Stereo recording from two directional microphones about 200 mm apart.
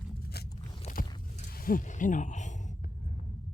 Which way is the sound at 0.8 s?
40° left (ahead or behind).